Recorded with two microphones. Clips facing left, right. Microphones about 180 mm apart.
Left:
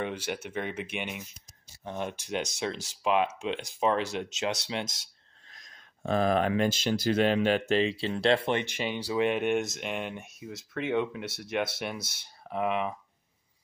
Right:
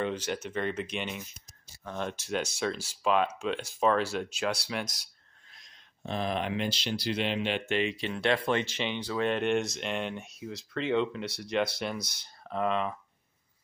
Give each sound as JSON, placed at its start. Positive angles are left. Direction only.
{"t": 0.0, "sound": "speech", "side_deg": 10}
{"t": 5.5, "sound": "speech", "side_deg": 45}
{"t": 8.5, "sound": "speech", "side_deg": 15}